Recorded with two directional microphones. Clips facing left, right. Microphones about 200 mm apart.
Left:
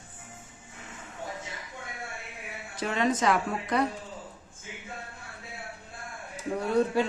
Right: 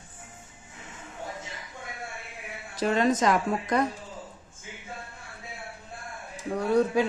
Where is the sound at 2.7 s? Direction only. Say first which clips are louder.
Right 4 dB; 40° right (ahead or behind).